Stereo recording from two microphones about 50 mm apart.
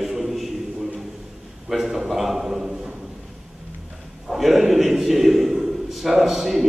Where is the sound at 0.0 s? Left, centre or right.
Centre.